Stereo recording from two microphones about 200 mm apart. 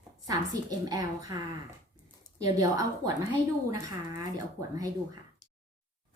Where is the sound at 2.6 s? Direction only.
15° right (ahead or behind).